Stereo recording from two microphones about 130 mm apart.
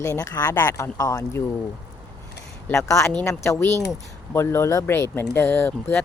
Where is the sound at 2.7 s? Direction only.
20° left (ahead or behind).